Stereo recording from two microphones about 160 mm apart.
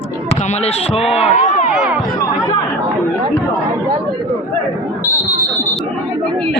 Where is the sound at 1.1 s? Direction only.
45° left (ahead or behind).